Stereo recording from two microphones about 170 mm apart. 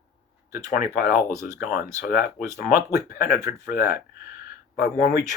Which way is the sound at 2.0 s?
55° left (ahead or behind).